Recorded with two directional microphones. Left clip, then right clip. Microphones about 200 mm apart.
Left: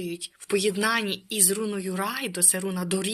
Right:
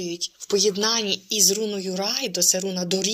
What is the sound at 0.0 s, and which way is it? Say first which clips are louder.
Speech: right 5 dB; 30° left (ahead or behind).